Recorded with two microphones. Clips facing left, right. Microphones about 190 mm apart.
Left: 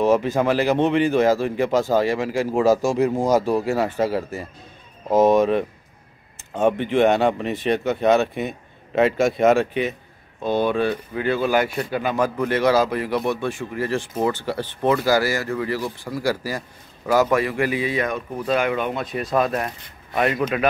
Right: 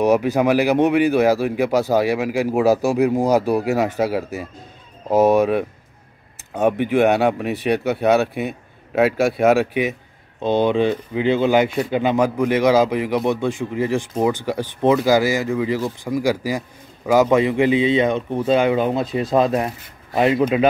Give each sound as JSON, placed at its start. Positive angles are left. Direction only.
{"t": 0.0, "sound": "speech", "side_deg": -15}
{"t": 10.4, "sound": "speech", "side_deg": -20}